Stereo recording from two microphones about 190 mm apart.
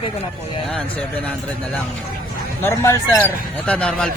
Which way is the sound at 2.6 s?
15° left (ahead or behind).